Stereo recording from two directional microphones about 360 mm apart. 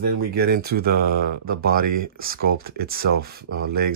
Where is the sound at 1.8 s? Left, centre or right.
Right.